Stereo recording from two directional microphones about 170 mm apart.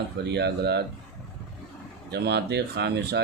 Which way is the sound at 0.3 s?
80° right.